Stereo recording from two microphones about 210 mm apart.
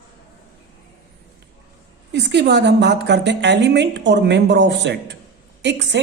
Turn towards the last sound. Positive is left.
turn(degrees=-55)  # may be behind; listen again after turning